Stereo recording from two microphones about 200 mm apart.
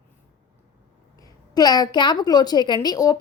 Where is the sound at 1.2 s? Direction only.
20° left (ahead or behind).